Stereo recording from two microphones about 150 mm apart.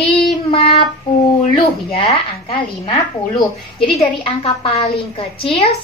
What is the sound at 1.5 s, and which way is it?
Speech, 35° left (ahead or behind).